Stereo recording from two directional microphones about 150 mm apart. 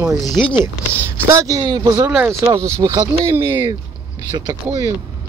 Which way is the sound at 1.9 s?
10° right (ahead or behind).